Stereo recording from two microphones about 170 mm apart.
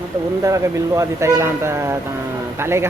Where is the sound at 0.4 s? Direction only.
20° right (ahead or behind).